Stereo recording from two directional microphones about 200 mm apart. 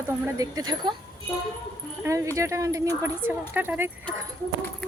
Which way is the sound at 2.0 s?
10° right (ahead or behind).